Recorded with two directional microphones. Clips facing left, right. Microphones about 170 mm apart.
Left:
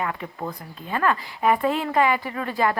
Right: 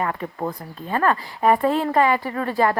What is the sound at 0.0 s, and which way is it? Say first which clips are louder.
Speech: right 4 dB; 40° right (ahead or behind).